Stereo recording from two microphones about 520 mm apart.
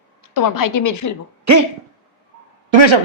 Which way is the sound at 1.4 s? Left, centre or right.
Right.